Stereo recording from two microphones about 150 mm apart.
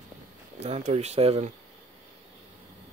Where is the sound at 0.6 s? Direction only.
45° right (ahead or behind).